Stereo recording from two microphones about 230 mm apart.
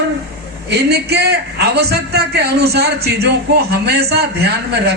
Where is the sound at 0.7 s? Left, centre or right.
Right.